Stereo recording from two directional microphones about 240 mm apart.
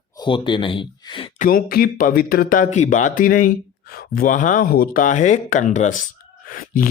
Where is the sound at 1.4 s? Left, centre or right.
Left.